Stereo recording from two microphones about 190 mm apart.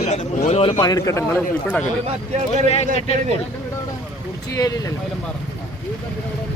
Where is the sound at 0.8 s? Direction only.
20° left (ahead or behind).